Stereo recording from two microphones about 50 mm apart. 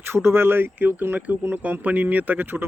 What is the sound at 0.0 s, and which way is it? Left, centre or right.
Speech, right.